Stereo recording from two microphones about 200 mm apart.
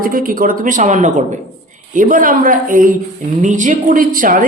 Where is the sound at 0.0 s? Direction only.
45° right (ahead or behind).